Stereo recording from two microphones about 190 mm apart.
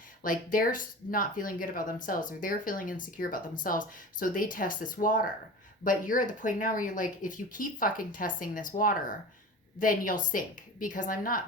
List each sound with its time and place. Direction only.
0.2 s speech: 45° left (ahead or behind)